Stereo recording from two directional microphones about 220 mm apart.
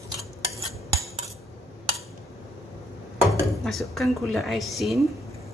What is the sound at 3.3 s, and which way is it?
Speech, centre (ahead or behind).